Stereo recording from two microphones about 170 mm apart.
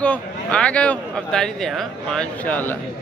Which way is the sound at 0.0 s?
5° left (ahead or behind).